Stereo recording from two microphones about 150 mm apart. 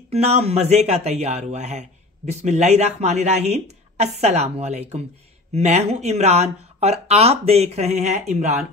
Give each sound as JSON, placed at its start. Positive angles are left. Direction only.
{"t": 0.1, "sound": "speech", "side_deg": -45}